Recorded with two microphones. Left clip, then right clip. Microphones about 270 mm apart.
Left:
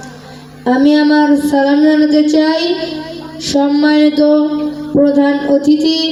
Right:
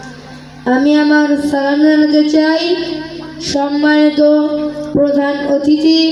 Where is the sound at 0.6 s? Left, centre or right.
Left.